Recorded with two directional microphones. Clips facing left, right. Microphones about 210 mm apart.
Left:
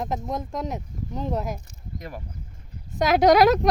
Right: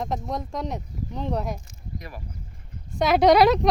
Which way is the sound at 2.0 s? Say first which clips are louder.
Left 4 dB; 45° left (ahead or behind).